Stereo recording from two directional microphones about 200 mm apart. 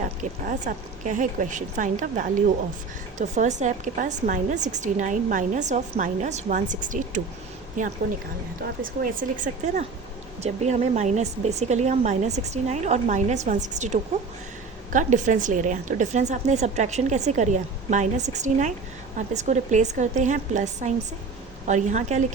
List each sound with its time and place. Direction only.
0.0 s a woman's voice: 40° right (ahead or behind)